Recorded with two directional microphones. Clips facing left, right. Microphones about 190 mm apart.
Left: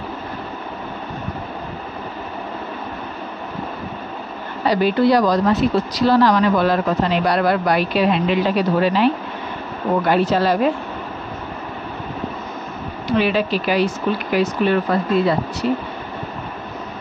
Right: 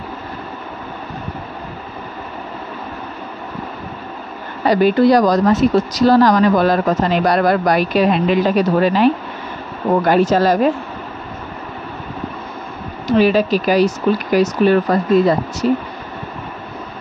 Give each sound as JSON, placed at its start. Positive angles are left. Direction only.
{"t": 4.6, "sound": "speech", "side_deg": -45}
{"t": 13.0, "sound": "speech", "side_deg": -40}